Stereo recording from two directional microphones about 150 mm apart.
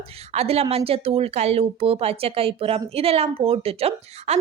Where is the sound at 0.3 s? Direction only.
40° right (ahead or behind).